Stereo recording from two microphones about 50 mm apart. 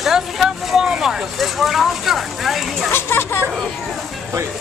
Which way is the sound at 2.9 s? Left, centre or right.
Left.